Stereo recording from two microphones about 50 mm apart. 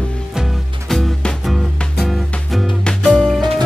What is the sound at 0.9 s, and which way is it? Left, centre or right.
Music, centre.